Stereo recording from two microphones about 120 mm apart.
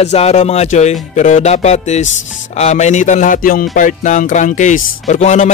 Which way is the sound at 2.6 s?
70° left (ahead or behind).